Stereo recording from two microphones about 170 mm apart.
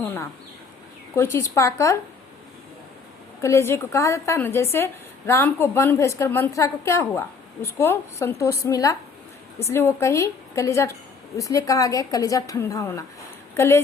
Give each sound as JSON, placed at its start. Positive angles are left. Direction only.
{"t": 0.0, "sound": "a woman's voice", "side_deg": 15}
{"t": 3.4, "sound": "a woman's voice", "side_deg": 15}